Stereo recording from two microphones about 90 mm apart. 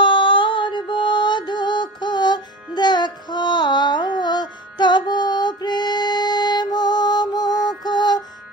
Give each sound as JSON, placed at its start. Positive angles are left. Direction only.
{"t": 0.0, "sound": "music", "side_deg": 65}